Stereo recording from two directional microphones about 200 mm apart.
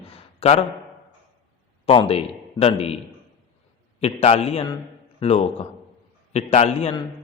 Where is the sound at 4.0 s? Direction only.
30° left (ahead or behind).